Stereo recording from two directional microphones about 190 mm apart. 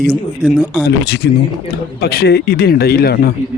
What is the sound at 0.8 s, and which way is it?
Speech, 60° left (ahead or behind).